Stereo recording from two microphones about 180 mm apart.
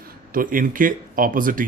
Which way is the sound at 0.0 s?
50° right (ahead or behind).